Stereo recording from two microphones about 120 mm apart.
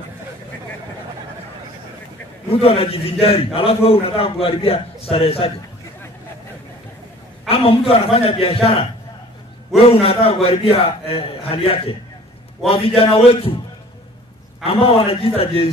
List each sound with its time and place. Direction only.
2.5 s a man's voice: 55° left (ahead or behind)
7.4 s a man's voice: 55° left (ahead or behind)
9.8 s a man's voice: 55° left (ahead or behind)
14.6 s a man's voice: 55° left (ahead or behind)